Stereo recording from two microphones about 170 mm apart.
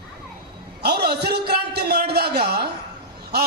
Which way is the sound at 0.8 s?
70° right (ahead or behind).